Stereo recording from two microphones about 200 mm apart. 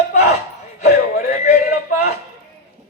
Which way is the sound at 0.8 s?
40° left (ahead or behind).